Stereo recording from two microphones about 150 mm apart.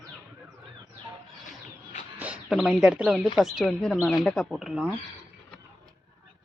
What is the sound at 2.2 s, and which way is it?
Speech, 10° right (ahead or behind).